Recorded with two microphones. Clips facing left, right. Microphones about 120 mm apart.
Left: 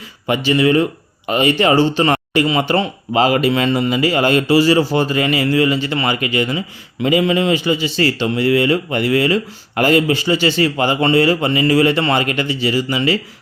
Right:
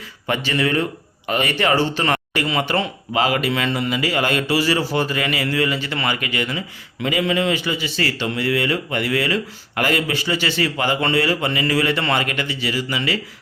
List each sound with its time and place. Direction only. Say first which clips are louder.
0.3 s speech: left 6 dB; 15° left (ahead or behind)